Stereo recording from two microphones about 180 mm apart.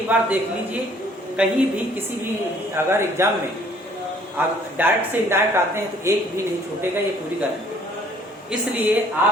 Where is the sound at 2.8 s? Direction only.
15° right (ahead or behind).